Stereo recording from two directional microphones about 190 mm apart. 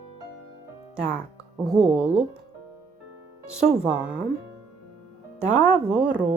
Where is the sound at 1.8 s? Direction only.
5° right (ahead or behind).